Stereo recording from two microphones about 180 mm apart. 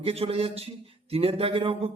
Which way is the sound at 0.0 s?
35° right (ahead or behind).